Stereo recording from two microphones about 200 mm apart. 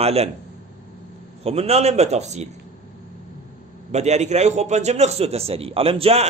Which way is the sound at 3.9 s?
35° right (ahead or behind).